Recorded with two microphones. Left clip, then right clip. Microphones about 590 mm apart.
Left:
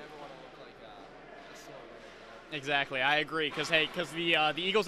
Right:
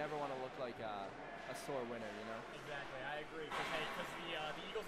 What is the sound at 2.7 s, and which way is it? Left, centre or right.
Speech, left.